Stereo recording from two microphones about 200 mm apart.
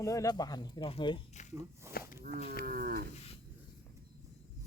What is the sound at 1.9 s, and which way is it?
Speech, 50° left (ahead or behind).